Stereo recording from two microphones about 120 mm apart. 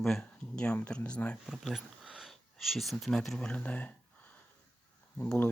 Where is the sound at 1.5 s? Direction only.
5° right (ahead or behind); by 3.9 s 15° left (ahead or behind).